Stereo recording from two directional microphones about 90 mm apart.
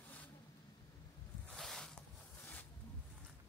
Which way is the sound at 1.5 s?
5° left (ahead or behind).